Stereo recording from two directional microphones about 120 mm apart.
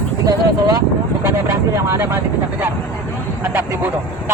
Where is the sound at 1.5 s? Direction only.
20° right (ahead or behind).